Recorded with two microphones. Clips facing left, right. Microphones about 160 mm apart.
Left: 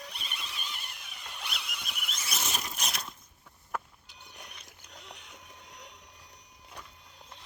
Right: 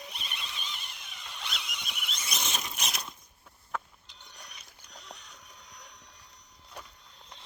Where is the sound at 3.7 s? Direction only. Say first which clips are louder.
Even; 10° left (ahead or behind).